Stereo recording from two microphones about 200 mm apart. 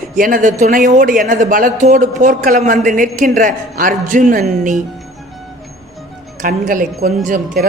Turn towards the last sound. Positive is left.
turn(degrees=-45)  # may be behind; listen again after turning